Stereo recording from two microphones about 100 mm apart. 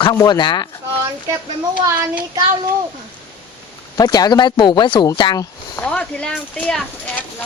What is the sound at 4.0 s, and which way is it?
Speech, 40° left (ahead or behind).